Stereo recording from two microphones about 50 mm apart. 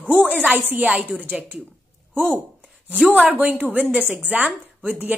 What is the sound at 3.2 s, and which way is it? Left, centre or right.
Speech, right.